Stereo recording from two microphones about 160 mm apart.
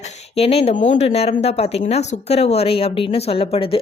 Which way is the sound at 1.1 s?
40° left (ahead or behind).